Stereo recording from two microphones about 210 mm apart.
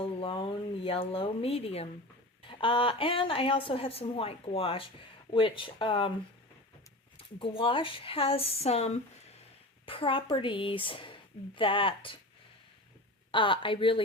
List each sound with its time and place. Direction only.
0.0 s a woman's voice: 25° left (ahead or behind)
7.2 s a woman's voice: 25° left (ahead or behind)
13.3 s a woman's voice: 25° left (ahead or behind)